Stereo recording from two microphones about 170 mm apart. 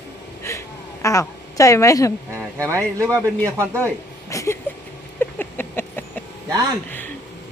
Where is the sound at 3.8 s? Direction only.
15° left (ahead or behind).